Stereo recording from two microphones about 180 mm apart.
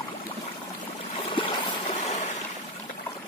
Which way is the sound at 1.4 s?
35° left (ahead or behind).